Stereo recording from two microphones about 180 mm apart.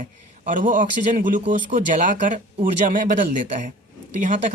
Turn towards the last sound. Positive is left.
turn(degrees=-45)  # may be behind; listen again after turning